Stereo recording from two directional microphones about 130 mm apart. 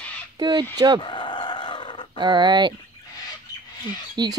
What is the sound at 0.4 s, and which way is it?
Speech, 35° right (ahead or behind).